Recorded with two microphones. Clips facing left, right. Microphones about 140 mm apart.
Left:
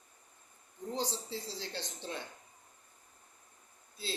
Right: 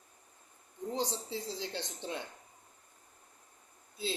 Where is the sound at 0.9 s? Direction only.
20° right (ahead or behind).